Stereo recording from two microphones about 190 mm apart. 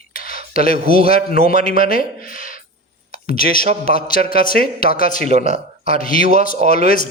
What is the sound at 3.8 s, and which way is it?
A man's voice, 50° left (ahead or behind).